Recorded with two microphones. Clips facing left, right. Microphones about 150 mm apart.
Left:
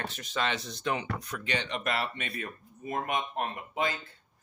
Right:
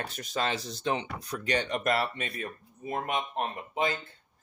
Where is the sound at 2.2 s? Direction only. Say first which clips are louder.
Right 1 dB; 30° right (ahead or behind).